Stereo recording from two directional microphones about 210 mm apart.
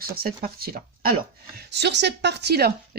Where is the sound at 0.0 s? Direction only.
45° right (ahead or behind).